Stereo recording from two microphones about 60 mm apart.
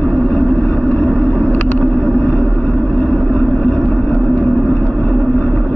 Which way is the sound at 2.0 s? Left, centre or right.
Left.